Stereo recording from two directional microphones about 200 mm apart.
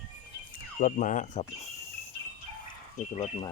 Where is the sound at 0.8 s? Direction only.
40° left (ahead or behind).